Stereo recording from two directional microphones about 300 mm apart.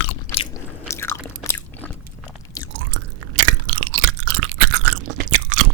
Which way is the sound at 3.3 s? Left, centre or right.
Right.